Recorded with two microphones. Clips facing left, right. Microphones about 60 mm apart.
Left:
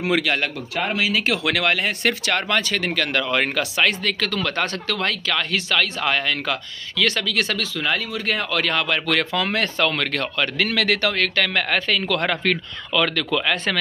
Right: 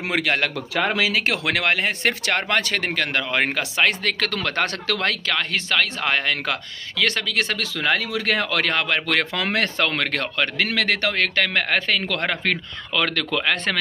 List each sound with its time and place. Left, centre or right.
0.1 s speech: right
1.4 s speech: right
2.9 s speech: right
4.0 s speech: right
5.3 s speech: right
7.6 s speech: right
8.6 s speech: right
12.9 s speech: right